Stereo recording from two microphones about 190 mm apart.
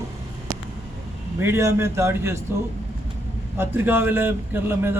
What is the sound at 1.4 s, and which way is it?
A man's voice, 15° right (ahead or behind).